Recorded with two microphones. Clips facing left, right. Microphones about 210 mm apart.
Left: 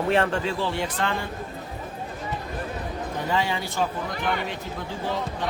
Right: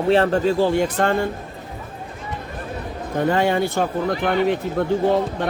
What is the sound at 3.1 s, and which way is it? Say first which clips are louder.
Speech: right 9 dB; 55° right (ahead or behind).